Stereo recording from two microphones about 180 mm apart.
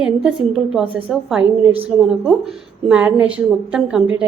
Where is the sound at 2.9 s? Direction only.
10° right (ahead or behind).